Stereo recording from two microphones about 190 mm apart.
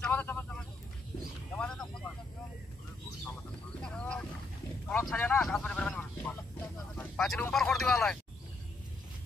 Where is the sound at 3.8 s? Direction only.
5° left (ahead or behind).